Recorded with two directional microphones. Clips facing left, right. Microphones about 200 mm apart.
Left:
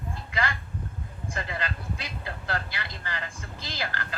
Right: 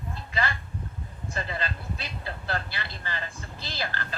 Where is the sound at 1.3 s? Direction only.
15° left (ahead or behind).